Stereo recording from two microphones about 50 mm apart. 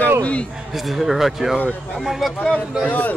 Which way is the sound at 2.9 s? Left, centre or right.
Left.